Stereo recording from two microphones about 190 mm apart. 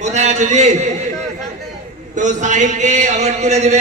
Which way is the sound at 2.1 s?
40° right (ahead or behind).